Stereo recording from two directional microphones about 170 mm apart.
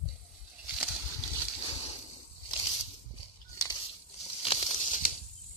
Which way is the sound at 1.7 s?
35° left (ahead or behind).